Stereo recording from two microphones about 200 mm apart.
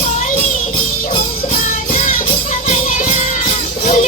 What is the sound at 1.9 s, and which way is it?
Music, 40° left (ahead or behind).